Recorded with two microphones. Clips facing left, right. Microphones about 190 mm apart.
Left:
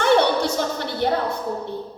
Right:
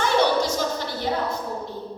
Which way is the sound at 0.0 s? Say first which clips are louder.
Left 3 dB; 60° left (ahead or behind).